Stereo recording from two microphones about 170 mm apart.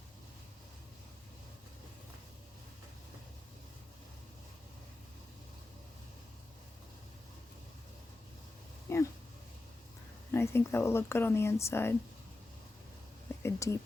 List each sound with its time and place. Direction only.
8.9 s a sound: 15° left (ahead or behind)
10.3 s speech: 15° left (ahead or behind)
13.4 s speech: 15° left (ahead or behind)